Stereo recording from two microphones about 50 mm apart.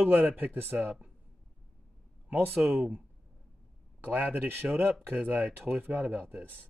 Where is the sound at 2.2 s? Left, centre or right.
Right.